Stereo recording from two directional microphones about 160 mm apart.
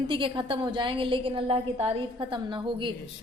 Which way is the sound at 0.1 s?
30° right (ahead or behind).